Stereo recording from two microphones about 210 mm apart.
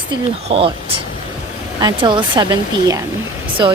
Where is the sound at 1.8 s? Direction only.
20° right (ahead or behind).